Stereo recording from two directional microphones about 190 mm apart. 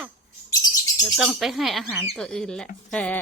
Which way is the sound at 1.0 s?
Centre (ahead or behind).